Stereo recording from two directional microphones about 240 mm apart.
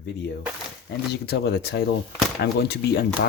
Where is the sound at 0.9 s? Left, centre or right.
Left.